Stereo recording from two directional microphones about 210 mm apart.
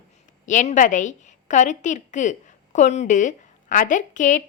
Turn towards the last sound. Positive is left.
turn(degrees=35)  # may be behind; listen again after turning